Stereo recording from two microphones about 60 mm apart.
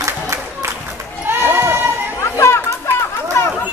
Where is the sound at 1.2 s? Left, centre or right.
Right.